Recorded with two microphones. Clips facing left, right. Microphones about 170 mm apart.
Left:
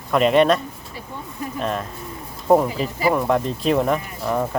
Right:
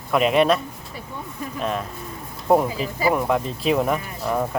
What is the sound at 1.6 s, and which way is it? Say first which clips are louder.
Speech: even; centre (ahead or behind).